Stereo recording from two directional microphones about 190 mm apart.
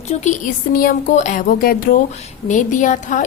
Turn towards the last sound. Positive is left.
turn(degrees=45)  # may be behind; listen again after turning